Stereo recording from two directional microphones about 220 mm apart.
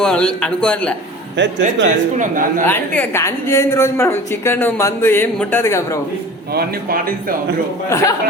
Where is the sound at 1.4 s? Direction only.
55° right (ahead or behind).